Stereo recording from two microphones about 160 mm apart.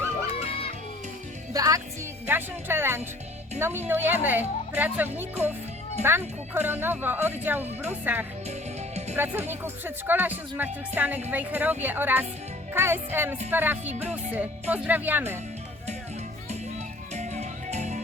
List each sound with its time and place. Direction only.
1.5 s speech: 20° right (ahead or behind)
17.2 s music: 45° right (ahead or behind)